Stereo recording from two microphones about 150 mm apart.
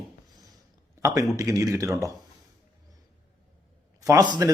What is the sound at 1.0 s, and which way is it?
A man's voice, 20° right (ahead or behind).